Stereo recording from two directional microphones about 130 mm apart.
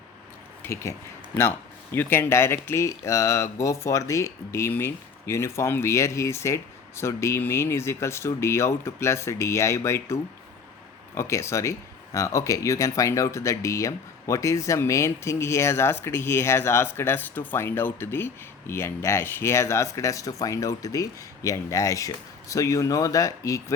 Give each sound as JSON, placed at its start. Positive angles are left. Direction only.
{"t": 0.6, "sound": "speech", "side_deg": 20}